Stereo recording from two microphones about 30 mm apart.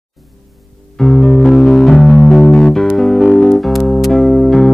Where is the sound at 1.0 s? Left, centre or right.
Centre.